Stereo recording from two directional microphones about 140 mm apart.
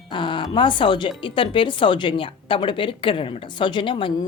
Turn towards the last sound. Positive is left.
turn(degrees=35)  # may be behind; listen again after turning